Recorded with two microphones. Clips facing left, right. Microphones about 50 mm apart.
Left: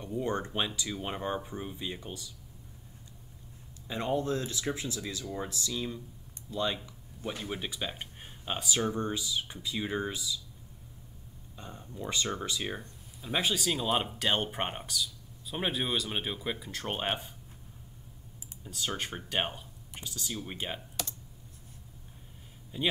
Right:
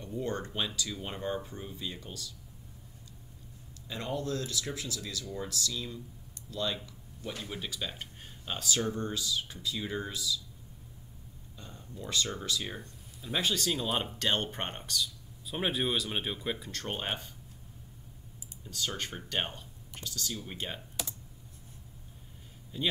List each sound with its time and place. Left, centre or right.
0.0 s speech: centre
3.8 s speech: left
11.5 s speech: left
13.2 s speech: centre
18.6 s speech: centre
22.7 s speech: centre